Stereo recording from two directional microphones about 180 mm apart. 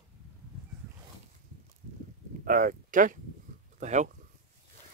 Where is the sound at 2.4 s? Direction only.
50° right (ahead or behind).